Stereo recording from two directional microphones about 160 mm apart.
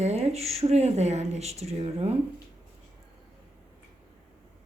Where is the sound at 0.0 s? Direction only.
40° right (ahead or behind).